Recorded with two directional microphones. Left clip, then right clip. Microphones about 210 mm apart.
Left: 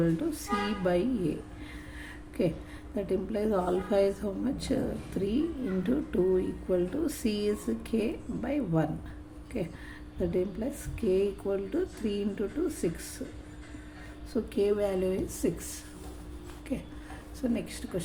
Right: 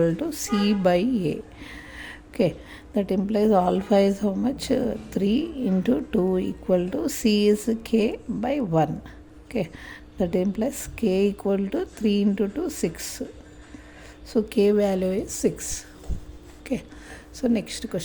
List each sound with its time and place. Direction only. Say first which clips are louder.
0.0 s speech: right 6 dB; 40° right (ahead or behind)
14.3 s speech: right 8 dB; 40° right (ahead or behind)